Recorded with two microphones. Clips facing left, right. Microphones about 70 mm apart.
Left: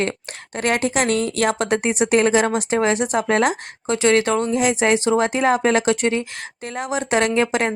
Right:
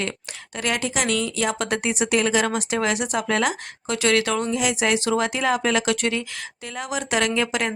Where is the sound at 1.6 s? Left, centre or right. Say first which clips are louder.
Left 4 dB; left.